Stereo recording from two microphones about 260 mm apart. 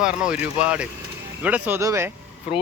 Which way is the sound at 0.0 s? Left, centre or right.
Centre.